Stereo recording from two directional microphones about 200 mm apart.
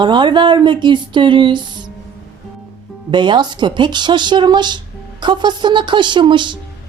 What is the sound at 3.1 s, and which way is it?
A woman's voice, 20° right (ahead or behind).